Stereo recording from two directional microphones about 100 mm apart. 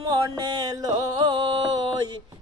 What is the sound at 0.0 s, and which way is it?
Music, 45° right (ahead or behind).